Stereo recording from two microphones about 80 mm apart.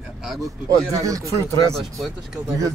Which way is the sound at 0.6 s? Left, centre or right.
Right.